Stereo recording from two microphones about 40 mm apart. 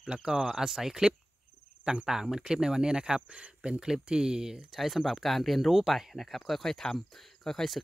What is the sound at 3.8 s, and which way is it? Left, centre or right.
Speech, centre.